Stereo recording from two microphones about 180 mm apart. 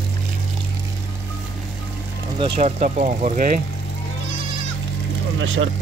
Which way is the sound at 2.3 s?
30° right (ahead or behind).